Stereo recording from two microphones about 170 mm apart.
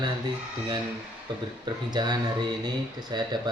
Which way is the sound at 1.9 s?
25° right (ahead or behind).